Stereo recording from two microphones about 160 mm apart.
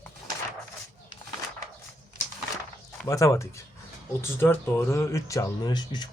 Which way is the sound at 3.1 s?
20° left (ahead or behind).